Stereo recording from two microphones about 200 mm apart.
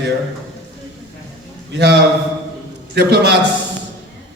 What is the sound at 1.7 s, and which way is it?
A man's voice, 55° right (ahead or behind).